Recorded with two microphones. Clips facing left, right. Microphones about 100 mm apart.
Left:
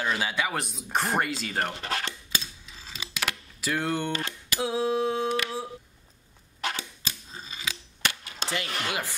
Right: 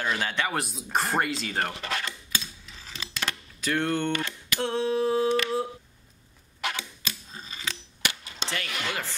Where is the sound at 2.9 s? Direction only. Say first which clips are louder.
Left 1 dB; 10° left (ahead or behind).